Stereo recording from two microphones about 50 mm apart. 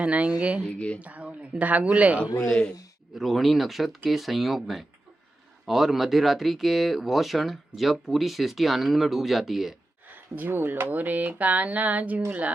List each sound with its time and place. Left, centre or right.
0.0 s speech: right
0.6 s speech: left
1.0 s speech: right
2.5 s speech: centre
3.2 s speech: centre
10.1 s speech: right